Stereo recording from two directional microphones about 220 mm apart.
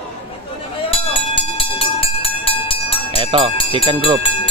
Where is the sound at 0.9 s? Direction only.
25° left (ahead or behind).